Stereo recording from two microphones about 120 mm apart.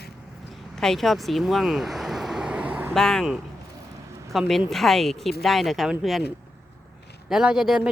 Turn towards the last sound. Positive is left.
turn(degrees=-5)  # may be behind; listen again after turning